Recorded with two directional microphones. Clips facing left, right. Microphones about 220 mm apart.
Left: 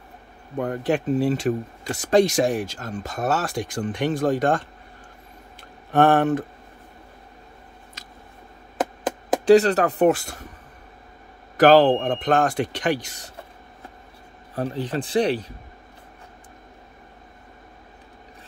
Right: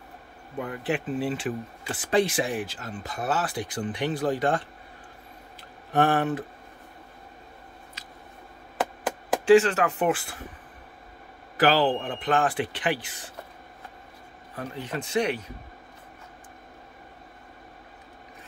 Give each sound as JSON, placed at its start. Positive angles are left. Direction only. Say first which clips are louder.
{"t": 0.6, "sound": "speech", "louder": "left 6 dB", "side_deg": 45}
{"t": 5.9, "sound": "speech", "louder": "left 6 dB", "side_deg": 50}
{"t": 9.4, "sound": "speech", "louder": "left 3 dB", "side_deg": 40}
{"t": 11.5, "sound": "speech", "louder": "left 8 dB", "side_deg": 45}
{"t": 14.5, "sound": "speech", "louder": "left 7 dB", "side_deg": 35}